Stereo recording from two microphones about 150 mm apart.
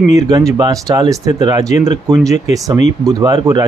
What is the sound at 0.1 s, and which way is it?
Speech, 20° right (ahead or behind).